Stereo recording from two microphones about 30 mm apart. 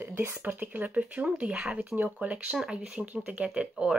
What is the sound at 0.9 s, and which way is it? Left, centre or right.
Speech, right.